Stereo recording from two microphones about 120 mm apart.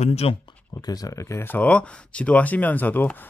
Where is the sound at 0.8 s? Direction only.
30° left (ahead or behind).